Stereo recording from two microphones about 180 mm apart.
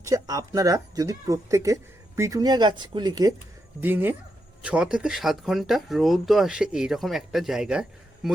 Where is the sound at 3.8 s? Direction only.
10° right (ahead or behind).